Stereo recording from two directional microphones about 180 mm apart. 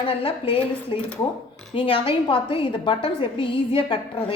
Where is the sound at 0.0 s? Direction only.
30° left (ahead or behind).